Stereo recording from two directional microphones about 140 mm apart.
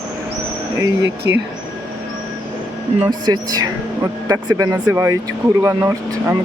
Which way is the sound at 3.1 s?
30° right (ahead or behind).